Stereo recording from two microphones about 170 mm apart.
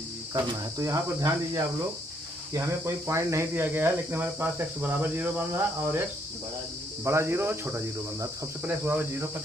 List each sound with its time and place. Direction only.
0.3 s speech: 20° right (ahead or behind)
7.0 s speech: 15° right (ahead or behind)